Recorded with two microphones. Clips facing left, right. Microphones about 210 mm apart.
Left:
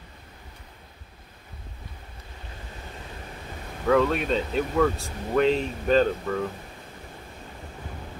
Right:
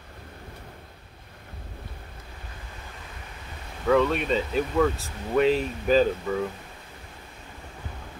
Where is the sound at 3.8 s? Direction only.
Centre (ahead or behind).